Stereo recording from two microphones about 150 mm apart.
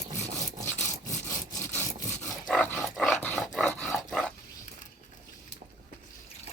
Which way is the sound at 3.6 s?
10° left (ahead or behind).